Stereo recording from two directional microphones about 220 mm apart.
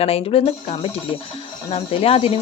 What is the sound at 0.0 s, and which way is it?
Speech, 25° left (ahead or behind).